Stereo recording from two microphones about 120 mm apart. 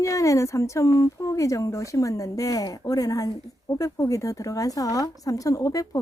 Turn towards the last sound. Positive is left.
turn(degrees=25)  # may be behind; listen again after turning